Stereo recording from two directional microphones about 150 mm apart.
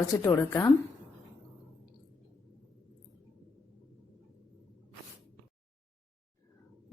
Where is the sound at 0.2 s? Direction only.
20° left (ahead or behind).